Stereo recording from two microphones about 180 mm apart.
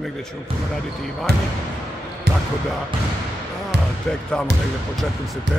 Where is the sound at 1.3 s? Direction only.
65° right (ahead or behind).